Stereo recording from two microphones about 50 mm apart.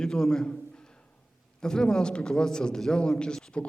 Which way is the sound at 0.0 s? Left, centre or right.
Centre.